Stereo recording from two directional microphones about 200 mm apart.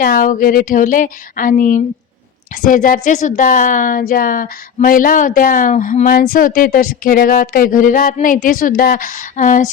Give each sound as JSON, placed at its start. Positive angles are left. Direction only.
{"t": 0.0, "sound": "speech", "side_deg": 45}